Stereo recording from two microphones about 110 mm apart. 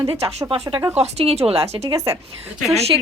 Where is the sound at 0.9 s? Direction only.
70° right (ahead or behind).